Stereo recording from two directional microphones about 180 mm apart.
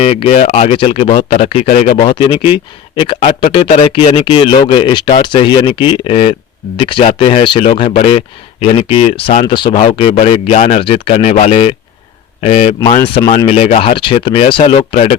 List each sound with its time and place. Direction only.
0.0 s speech: 35° left (ahead or behind)
1.9 s speech: 25° left (ahead or behind)